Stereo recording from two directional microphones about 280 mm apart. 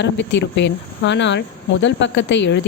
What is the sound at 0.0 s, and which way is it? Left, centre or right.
Speech, left.